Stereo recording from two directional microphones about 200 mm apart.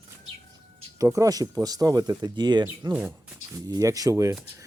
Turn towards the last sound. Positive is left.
turn(degrees=-15)  # may be behind; listen again after turning